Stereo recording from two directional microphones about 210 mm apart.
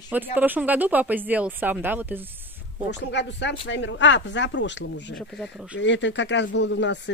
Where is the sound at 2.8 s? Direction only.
55° left (ahead or behind).